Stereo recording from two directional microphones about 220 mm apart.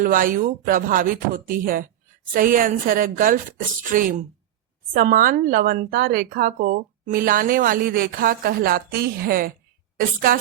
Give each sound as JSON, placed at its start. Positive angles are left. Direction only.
{"t": 0.0, "sound": "speech", "side_deg": -40}